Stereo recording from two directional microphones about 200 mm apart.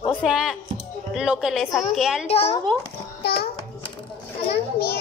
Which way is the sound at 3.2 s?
50° left (ahead or behind).